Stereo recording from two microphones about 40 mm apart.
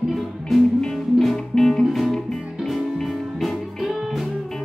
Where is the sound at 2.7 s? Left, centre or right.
Centre.